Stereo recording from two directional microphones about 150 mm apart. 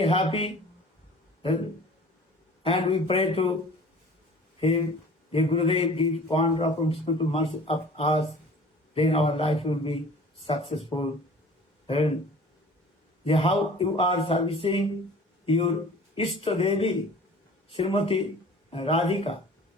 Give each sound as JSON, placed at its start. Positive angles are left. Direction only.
{"t": 0.0, "sound": "a man's voice", "side_deg": 40}
{"t": 2.6, "sound": "a man's voice", "side_deg": 40}
{"t": 5.3, "sound": "a man's voice", "side_deg": 40}
{"t": 13.2, "sound": "a man's voice", "side_deg": 40}